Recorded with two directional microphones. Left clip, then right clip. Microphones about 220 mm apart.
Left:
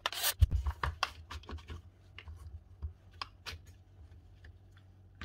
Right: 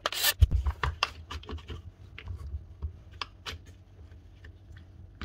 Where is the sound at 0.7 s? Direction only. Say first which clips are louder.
Right 5 dB; 5° right (ahead or behind).